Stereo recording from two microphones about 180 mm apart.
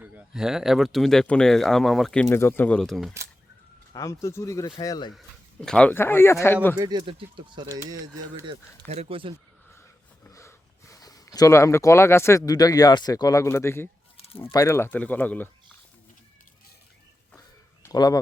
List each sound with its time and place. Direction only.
0.0 s speech: 5° right (ahead or behind)
2.3 s a man's voice: 10° left (ahead or behind)
3.9 s a man's voice: 15° left (ahead or behind)
5.1 s a man's voice: 5° left (ahead or behind)
6.7 s speech: 25° right (ahead or behind)
8.9 s speech: 35° right (ahead or behind)
10.2 s a sound: 15° left (ahead or behind)
12.5 s a man's voice: 20° left (ahead or behind)
17.8 s speech: 20° left (ahead or behind)